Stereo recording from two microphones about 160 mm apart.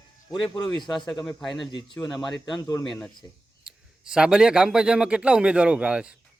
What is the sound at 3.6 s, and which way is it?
Speech, 5° right (ahead or behind).